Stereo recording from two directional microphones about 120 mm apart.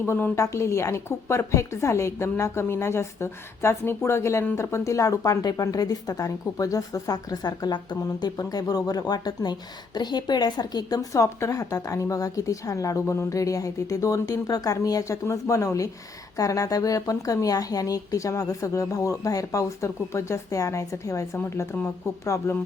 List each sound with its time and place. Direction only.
0.0 s a woman's voice: 15° left (ahead or behind)